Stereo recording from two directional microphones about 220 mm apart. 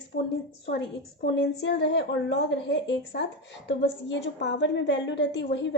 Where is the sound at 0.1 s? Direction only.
40° left (ahead or behind).